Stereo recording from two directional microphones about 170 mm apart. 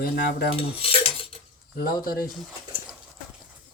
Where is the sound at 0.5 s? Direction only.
35° left (ahead or behind).